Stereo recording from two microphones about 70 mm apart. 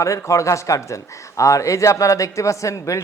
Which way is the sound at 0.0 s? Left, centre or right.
Left.